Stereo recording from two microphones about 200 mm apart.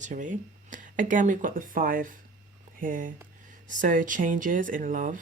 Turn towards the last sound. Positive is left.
turn(degrees=-40)  # may be behind; listen again after turning